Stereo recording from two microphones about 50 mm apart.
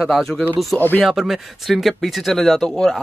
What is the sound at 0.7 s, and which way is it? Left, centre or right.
Speech, left.